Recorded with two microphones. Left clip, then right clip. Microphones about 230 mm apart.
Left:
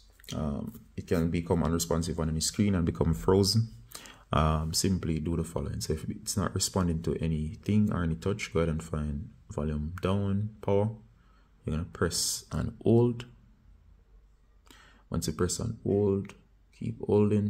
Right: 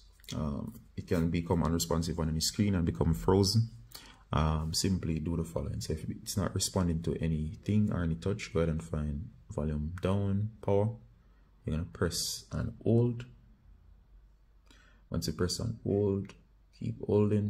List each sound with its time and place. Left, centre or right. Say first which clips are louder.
0.2 s speech: left 3 dB; centre
14.7 s speech: left 3 dB; centre